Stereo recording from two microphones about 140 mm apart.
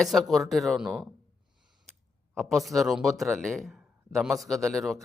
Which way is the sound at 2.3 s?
5° left (ahead or behind).